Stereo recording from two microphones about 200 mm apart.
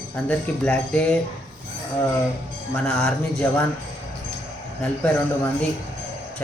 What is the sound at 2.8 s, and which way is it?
Speech, 5° left (ahead or behind).